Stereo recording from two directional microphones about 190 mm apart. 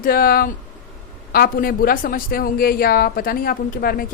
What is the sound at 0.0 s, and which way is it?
Speech, 50° left (ahead or behind).